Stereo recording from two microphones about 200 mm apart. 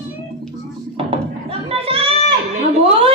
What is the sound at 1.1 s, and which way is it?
Children playing, 30° right (ahead or behind).